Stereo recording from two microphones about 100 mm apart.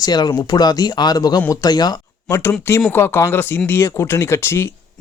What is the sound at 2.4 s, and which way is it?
Speech, 25° left (ahead or behind).